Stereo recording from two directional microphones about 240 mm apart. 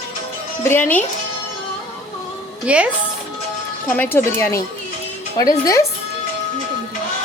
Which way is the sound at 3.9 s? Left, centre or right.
Centre.